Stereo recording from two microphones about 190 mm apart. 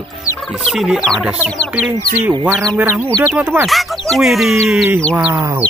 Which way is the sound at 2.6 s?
15° right (ahead or behind).